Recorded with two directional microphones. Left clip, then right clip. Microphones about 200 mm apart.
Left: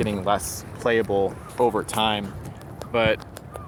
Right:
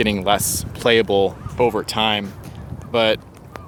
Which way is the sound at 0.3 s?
30° right (ahead or behind).